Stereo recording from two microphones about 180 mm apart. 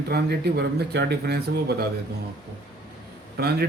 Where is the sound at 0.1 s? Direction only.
65° right (ahead or behind).